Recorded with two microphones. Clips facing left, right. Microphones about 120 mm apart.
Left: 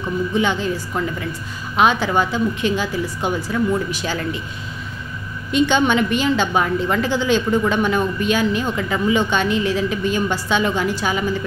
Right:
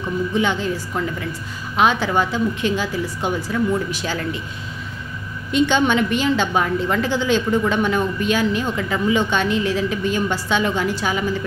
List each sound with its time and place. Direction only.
0.4 s a woman's voice: 20° left (ahead or behind)
5.5 s a woman's voice: 15° left (ahead or behind)